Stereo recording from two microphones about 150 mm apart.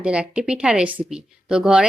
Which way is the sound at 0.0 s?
5° right (ahead or behind).